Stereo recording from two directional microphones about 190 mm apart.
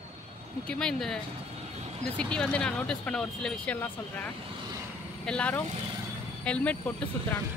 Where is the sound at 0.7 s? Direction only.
5° left (ahead or behind).